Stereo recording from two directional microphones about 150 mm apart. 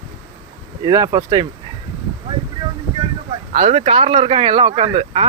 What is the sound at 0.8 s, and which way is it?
Speech, 25° right (ahead or behind).